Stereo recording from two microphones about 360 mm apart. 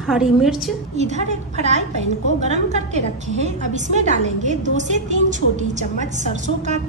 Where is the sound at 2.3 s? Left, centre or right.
Centre.